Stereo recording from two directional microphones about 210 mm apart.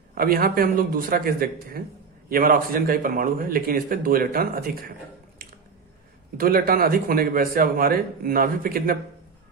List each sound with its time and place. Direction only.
0.1 s a man's voice: 45° right (ahead or behind)
6.3 s a man's voice: 45° right (ahead or behind)